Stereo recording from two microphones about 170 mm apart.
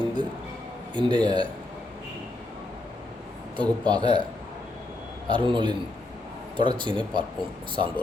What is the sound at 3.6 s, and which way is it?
Speech, 25° right (ahead or behind).